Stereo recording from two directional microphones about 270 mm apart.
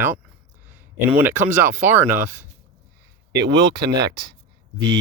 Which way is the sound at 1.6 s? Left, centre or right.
Centre.